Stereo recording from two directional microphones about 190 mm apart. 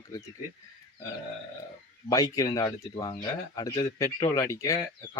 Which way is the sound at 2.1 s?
20° left (ahead or behind).